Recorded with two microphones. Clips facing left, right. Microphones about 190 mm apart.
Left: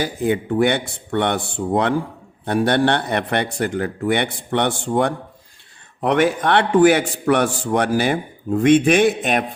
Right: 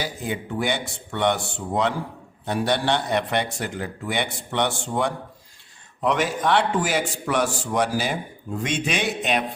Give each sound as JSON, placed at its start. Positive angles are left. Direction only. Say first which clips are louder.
{"t": 0.0, "sound": "a man's voice", "louder": "left 8 dB", "side_deg": 55}